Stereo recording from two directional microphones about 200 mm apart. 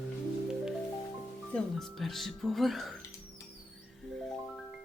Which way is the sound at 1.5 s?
Centre (ahead or behind).